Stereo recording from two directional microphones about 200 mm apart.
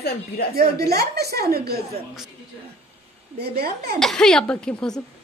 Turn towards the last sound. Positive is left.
turn(degrees=5)  # may be behind; listen again after turning